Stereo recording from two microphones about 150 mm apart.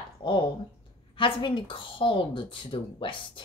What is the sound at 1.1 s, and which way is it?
Speech, 35° left (ahead or behind).